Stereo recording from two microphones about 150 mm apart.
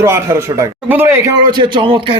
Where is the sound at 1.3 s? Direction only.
30° right (ahead or behind).